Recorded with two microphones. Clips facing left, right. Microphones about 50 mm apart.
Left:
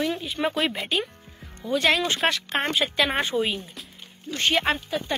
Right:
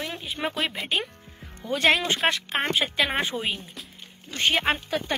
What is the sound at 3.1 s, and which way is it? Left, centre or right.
A woman's voice, centre.